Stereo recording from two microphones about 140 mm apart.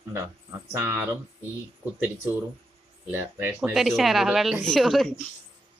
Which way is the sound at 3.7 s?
Centre (ahead or behind).